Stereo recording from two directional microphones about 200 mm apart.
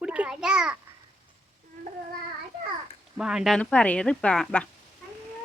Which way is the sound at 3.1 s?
5° right (ahead or behind).